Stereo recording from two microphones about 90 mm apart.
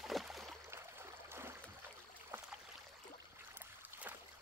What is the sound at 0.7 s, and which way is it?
Stream, 30° right (ahead or behind).